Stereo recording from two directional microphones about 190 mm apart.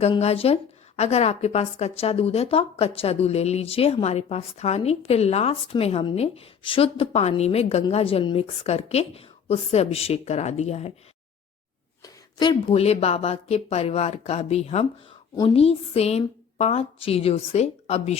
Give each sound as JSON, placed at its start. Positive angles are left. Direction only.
{"t": 0.0, "sound": "a woman's voice", "side_deg": 35}
{"t": 12.0, "sound": "a woman's voice", "side_deg": 25}